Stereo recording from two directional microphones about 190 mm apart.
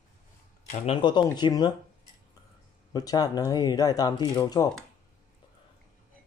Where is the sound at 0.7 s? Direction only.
25° left (ahead or behind).